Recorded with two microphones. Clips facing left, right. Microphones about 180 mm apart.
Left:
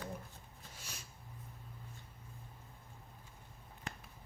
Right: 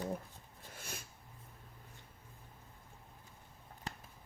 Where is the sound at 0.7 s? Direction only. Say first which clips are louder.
Right 6 dB; 55° right (ahead or behind).